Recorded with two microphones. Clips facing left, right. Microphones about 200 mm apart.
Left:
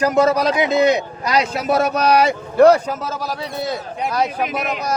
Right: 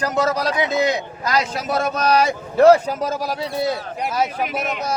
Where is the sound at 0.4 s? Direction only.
20° left (ahead or behind).